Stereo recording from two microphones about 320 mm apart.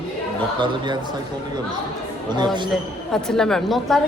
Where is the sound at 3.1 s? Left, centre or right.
Centre.